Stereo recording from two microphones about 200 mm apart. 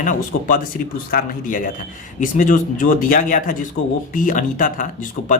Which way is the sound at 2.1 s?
40° left (ahead or behind).